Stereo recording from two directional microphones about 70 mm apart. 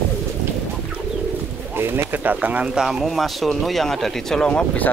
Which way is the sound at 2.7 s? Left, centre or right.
Centre.